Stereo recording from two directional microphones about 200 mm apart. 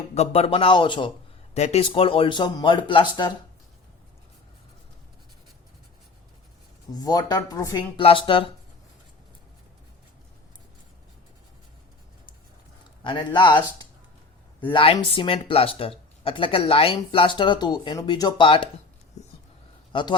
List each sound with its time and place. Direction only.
0.1 s speech: 30° left (ahead or behind)
6.9 s speech: 20° left (ahead or behind)
13.0 s speech: 25° left (ahead or behind)
14.7 s speech: 25° left (ahead or behind)
19.9 s a man's voice: 25° left (ahead or behind)